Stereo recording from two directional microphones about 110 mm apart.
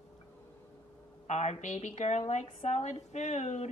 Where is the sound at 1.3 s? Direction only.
90° left.